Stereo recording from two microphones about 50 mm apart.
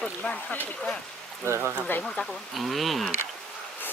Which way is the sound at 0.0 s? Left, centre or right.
Left.